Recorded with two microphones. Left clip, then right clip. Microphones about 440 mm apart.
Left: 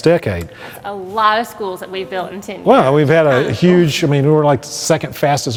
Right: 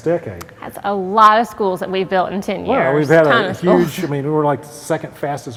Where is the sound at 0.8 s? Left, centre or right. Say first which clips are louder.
Right 4 dB; right.